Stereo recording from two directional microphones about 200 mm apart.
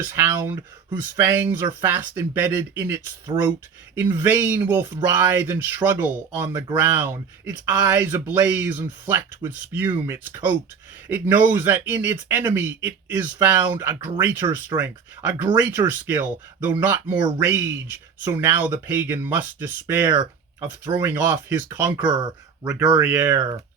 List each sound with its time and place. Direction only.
0.0 s speech: 10° right (ahead or behind)